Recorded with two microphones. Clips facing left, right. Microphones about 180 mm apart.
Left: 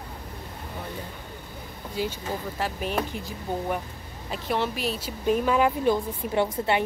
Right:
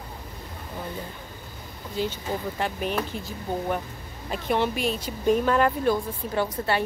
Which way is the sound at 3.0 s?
15° left (ahead or behind).